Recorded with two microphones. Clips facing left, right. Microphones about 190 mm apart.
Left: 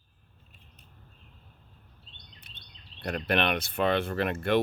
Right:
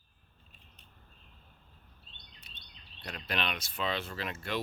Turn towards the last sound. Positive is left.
turn(degrees=55)  # may be behind; listen again after turning